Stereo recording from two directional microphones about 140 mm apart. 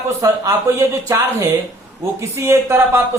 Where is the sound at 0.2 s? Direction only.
25° right (ahead or behind).